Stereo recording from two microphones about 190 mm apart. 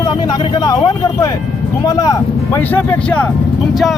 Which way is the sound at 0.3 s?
20° left (ahead or behind).